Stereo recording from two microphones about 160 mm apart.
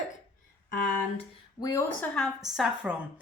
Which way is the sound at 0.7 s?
60° left (ahead or behind).